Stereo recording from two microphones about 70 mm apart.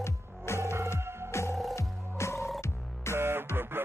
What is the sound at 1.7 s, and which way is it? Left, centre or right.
Music, left.